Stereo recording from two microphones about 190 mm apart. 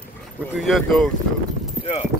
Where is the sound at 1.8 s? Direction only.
5° right (ahead or behind).